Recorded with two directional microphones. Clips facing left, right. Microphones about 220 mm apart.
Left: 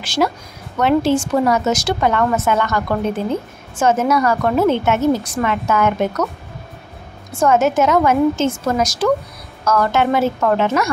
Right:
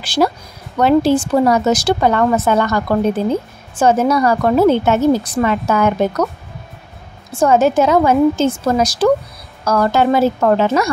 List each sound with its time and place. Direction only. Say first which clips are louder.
0.0 s a woman's voice: right 3 dB; 35° right (ahead or behind)
3.8 s a woman's voice: right 2 dB; 35° right (ahead or behind)
7.3 s a woman's voice: right 2 dB; 30° right (ahead or behind)